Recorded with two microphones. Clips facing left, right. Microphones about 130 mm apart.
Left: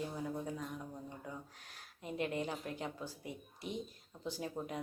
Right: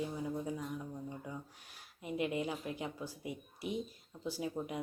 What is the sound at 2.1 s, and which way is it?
Speech, 10° right (ahead or behind).